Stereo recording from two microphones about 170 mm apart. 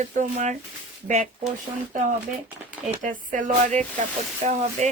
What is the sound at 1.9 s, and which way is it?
Speech, 50° right (ahead or behind).